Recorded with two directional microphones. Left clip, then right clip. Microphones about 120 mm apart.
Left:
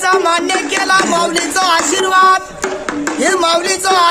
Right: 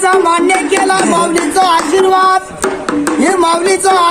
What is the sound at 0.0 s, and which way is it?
Speech, 35° left (ahead or behind).